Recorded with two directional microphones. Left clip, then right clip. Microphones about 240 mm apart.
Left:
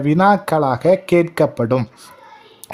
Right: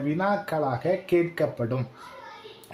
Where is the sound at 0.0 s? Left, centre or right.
Left.